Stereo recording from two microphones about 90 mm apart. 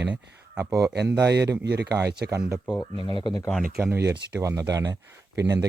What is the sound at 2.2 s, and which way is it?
Speech, 35° right (ahead or behind).